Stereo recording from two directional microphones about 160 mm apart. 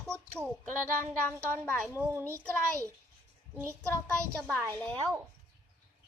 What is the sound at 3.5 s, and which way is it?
Speech, 15° right (ahead or behind).